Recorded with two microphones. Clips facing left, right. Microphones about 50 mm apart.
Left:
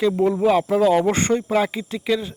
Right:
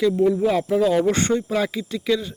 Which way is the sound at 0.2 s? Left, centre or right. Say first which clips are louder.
Left 1 dB; left.